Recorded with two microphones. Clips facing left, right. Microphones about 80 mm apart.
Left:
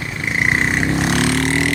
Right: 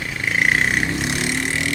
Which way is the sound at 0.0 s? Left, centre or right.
Centre.